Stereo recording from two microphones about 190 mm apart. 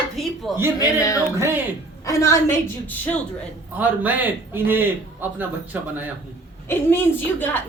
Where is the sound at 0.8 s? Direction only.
15° left (ahead or behind).